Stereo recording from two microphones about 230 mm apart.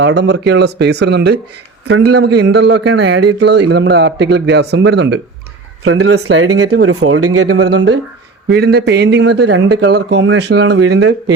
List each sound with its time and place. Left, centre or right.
0.0 s a man's voice: right
1.9 s speech: right
2.1 s a man's voice: right
5.8 s speech: right
6.1 s speech: right
8.4 s a man's voice: right